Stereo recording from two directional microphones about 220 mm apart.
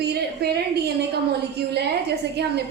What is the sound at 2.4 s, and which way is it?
Speech, 50° right (ahead or behind).